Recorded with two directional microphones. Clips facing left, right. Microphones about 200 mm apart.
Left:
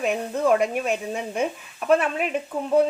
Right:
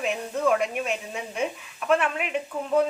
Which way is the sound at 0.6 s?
45° left (ahead or behind).